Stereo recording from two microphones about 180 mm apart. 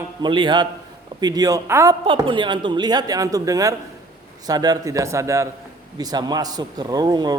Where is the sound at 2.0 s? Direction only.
30° right (ahead or behind).